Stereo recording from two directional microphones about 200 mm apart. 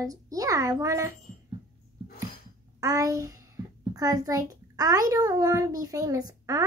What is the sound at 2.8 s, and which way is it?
A child's voice, 15° right (ahead or behind).